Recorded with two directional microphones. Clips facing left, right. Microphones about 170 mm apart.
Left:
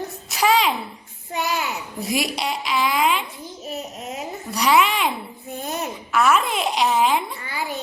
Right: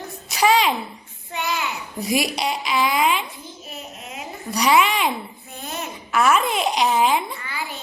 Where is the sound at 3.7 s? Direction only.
40° left (ahead or behind).